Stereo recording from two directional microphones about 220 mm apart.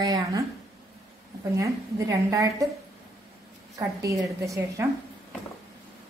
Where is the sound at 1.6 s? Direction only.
15° right (ahead or behind).